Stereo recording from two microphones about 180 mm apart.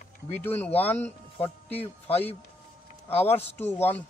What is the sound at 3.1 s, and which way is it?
Speech, 35° left (ahead or behind).